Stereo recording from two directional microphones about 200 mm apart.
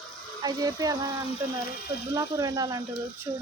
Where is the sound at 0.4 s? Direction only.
20° right (ahead or behind).